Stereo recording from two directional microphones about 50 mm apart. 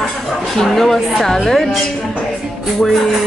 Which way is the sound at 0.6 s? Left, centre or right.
Centre.